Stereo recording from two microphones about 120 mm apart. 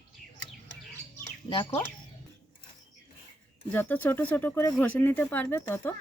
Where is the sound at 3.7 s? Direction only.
15° left (ahead or behind).